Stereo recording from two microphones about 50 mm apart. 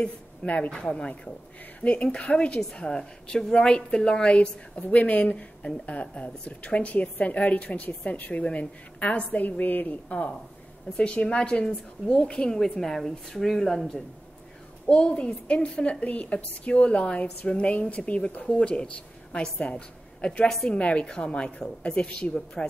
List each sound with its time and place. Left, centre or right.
0.0 s a woman's voice: left
11.0 s a woman's voice: centre
14.9 s a woman's voice: left